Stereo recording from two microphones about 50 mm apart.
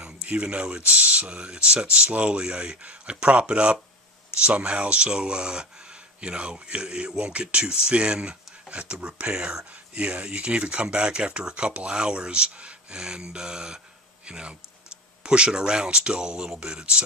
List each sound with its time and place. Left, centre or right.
0.0 s speech: right